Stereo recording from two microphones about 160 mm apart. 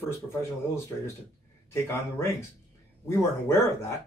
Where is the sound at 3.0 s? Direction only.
15° left (ahead or behind).